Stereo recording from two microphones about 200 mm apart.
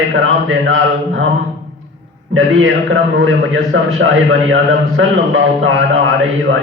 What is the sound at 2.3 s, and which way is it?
A man's voice, 75° right (ahead or behind).